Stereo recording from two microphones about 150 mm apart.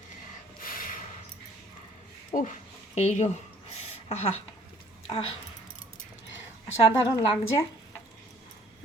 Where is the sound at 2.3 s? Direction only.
60° left (ahead or behind).